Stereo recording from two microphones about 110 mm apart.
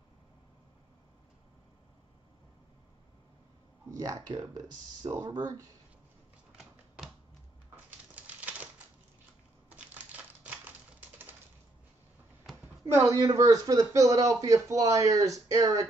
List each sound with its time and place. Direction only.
3.9 s speech: 30° right (ahead or behind)
7.7 s typewriter: 15° right (ahead or behind)
9.7 s crumpling: 15° right (ahead or behind)
12.8 s speech: 25° right (ahead or behind)